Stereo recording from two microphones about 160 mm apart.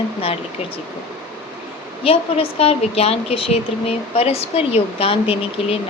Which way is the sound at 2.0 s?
35° left (ahead or behind).